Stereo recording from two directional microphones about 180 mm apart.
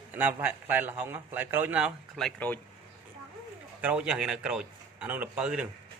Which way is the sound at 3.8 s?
5° right (ahead or behind).